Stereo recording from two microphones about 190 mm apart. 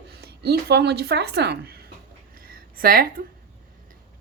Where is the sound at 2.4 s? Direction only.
50° right (ahead or behind).